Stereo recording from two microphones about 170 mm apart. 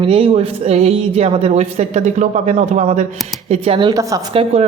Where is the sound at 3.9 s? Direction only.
20° right (ahead or behind).